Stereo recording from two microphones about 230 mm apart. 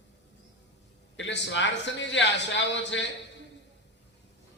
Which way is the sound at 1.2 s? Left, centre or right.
Left.